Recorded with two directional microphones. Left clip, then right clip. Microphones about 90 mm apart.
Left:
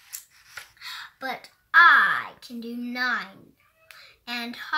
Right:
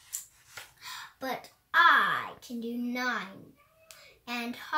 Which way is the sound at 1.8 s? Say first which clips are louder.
Left 6 dB; 10° right (ahead or behind).